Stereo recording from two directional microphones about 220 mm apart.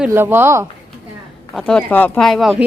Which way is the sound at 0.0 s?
10° right (ahead or behind).